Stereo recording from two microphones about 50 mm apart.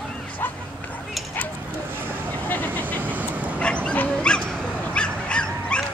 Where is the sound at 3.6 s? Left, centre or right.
Left.